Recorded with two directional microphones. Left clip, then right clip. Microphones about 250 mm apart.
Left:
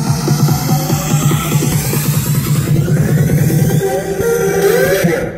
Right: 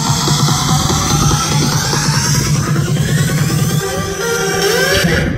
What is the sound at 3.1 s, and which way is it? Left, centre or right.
Music, centre.